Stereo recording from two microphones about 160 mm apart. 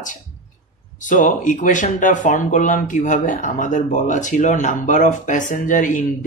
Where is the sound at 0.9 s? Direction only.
50° left (ahead or behind).